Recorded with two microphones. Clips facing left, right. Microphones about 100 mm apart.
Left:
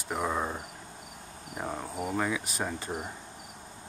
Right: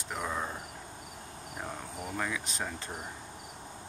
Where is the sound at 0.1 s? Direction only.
15° left (ahead or behind).